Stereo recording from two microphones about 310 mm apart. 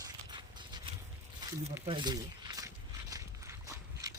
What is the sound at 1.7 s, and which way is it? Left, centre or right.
Walk, centre.